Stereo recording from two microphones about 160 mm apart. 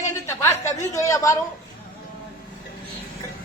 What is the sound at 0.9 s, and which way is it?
Speech, 20° left (ahead or behind).